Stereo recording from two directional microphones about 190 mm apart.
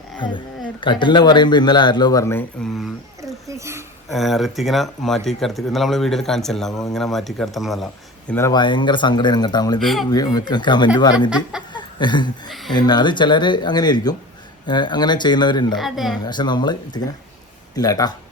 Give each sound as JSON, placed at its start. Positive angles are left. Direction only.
{"t": 0.2, "sound": "speech", "side_deg": 25}
{"t": 2.6, "sound": "speech", "side_deg": 0}
{"t": 3.2, "sound": "a sound", "side_deg": -15}
{"t": 4.1, "sound": "speech", "side_deg": 0}
{"t": 8.3, "sound": "speech", "side_deg": 15}
{"t": 9.8, "sound": "speech", "side_deg": 0}
{"t": 10.1, "sound": "speech", "side_deg": 20}
{"t": 11.7, "sound": "a sound", "side_deg": 25}
{"t": 12.7, "sound": "speech", "side_deg": 20}
{"t": 15.7, "sound": "speech", "side_deg": 0}
{"t": 16.2, "sound": "speech", "side_deg": 25}